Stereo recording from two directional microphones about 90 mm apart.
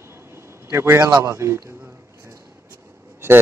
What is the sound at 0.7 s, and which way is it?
Speech, 30° right (ahead or behind).